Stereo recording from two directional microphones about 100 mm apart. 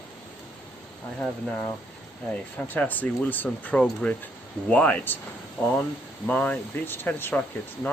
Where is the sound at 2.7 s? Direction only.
15° left (ahead or behind).